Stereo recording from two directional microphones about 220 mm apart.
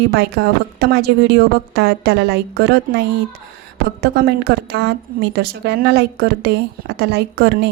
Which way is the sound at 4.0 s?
45° right (ahead or behind).